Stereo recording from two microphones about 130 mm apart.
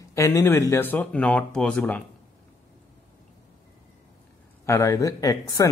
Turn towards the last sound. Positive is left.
turn(degrees=25)  # may be behind; listen again after turning